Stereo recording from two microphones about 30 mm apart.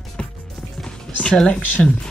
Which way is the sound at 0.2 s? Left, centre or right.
Left.